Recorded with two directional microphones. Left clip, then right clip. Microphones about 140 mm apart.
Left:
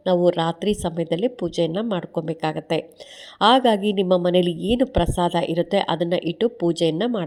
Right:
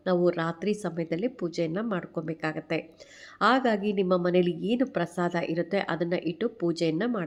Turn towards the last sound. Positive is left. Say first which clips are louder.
# left 6 dB
turn(degrees=40)  # may be behind; listen again after turning